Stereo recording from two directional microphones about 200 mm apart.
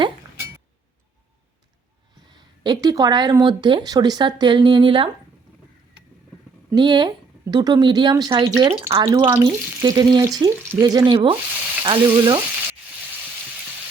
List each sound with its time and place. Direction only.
2.3 s speech: 20° right (ahead or behind)
6.7 s speech: 20° right (ahead or behind)